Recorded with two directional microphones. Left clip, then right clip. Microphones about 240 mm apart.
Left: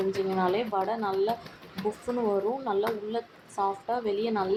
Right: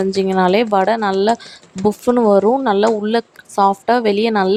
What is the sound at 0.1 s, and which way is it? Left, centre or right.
Speech, right.